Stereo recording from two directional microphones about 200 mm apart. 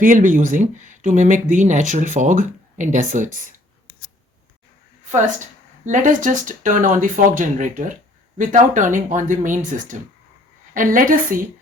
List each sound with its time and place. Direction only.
0.0 s speech: 40° right (ahead or behind)
5.1 s a woman's voice: 40° right (ahead or behind)